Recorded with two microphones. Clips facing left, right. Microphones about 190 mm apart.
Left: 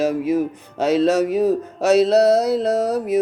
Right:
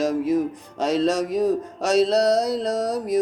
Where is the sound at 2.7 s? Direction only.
60° left (ahead or behind).